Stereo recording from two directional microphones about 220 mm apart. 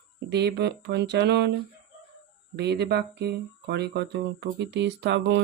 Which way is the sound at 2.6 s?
50° right (ahead or behind).